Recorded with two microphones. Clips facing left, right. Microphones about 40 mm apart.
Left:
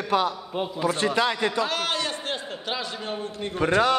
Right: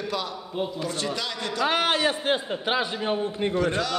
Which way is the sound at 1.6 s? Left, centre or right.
Right.